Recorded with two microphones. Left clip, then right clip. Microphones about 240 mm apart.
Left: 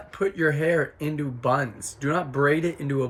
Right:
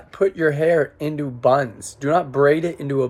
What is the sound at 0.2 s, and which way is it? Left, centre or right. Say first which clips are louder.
Speech: right 5 dB; centre.